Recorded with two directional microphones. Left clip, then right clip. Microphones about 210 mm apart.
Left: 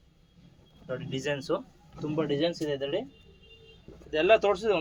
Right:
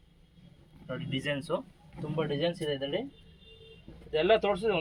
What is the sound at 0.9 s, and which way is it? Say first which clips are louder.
Speech: left 2 dB; 50° left (ahead or behind).